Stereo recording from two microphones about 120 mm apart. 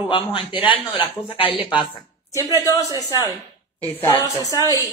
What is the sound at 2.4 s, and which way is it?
Speech, 30° left (ahead or behind).